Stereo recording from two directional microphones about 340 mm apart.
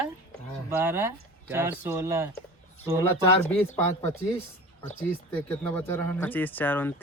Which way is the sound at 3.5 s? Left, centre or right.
Centre.